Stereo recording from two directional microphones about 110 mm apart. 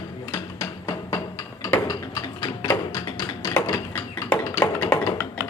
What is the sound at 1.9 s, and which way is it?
Tap, 35° left (ahead or behind).